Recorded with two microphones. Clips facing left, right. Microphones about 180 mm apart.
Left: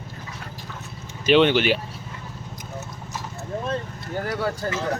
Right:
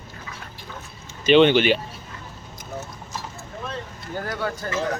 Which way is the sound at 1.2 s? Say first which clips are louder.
Right 2 dB; 5° left (ahead or behind).